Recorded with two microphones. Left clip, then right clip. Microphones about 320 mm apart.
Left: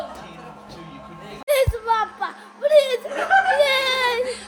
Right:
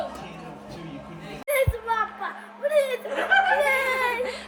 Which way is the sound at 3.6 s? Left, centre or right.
Left.